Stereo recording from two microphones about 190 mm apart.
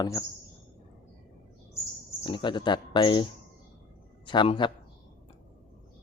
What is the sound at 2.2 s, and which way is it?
Speech, 25° left (ahead or behind).